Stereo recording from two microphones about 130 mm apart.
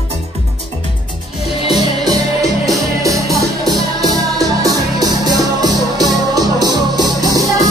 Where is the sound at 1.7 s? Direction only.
30° right (ahead or behind).